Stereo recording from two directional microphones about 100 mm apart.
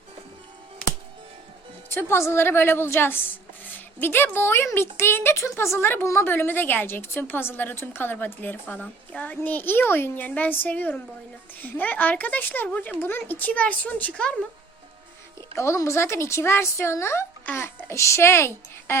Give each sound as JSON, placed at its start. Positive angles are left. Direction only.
{"t": 1.9, "sound": "a woman's voice", "side_deg": 25}
{"t": 15.5, "sound": "a woman's voice", "side_deg": 30}